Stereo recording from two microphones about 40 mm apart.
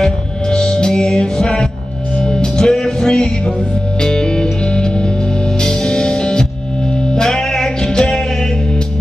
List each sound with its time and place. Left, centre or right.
0.0 s music: centre
2.7 s music: centre
4.0 s music: centre